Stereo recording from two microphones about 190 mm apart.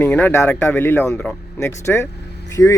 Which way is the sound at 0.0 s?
10° left (ahead or behind).